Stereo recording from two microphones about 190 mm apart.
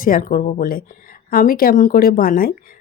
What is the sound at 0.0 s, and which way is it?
Speech, 45° left (ahead or behind).